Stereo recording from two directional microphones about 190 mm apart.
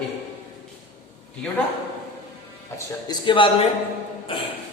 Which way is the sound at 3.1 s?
25° left (ahead or behind).